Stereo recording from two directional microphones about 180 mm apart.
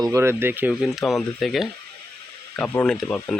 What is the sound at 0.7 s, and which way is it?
Speech, centre (ahead or behind).